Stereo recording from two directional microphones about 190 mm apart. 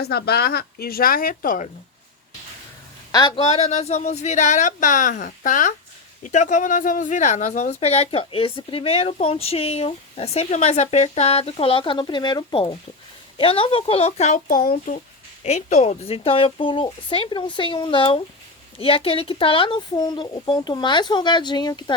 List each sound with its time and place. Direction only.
0.0 s speech: 55° left (ahead or behind)
3.1 s a woman's voice: 20° left (ahead or behind)